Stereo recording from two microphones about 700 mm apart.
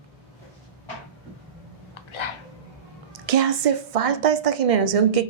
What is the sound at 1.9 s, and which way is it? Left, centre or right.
Dog, left.